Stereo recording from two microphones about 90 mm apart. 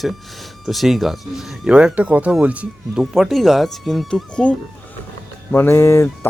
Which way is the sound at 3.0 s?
5° right (ahead or behind).